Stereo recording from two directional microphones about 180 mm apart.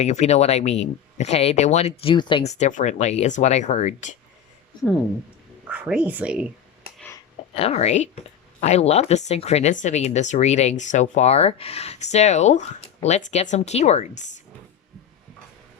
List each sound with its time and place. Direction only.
0.0 s speech: 40° left (ahead or behind)
5.6 s speech: 10° right (ahead or behind)
7.5 s speech: 35° left (ahead or behind)